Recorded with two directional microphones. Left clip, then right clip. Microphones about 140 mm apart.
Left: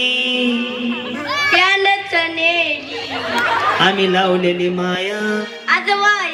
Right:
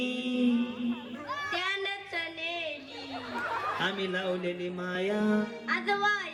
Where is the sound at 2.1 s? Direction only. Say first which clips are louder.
Left 18 dB; 30° right (ahead or behind).